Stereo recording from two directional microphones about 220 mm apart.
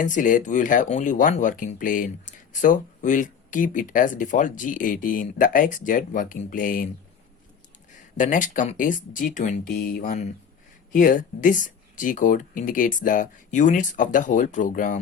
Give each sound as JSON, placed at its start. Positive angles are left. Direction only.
{"t": 0.0, "sound": "speech", "side_deg": 35}
{"t": 8.1, "sound": "speech", "side_deg": 35}